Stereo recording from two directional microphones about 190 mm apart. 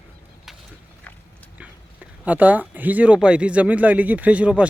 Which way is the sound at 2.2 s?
10° right (ahead or behind).